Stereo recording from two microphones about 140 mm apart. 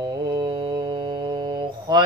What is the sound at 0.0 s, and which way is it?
Mantra, 30° right (ahead or behind).